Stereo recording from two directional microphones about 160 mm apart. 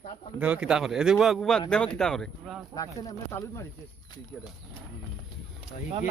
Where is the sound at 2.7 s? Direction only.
20° left (ahead or behind).